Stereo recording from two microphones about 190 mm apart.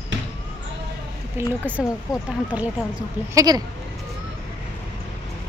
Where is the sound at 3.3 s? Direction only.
20° right (ahead or behind).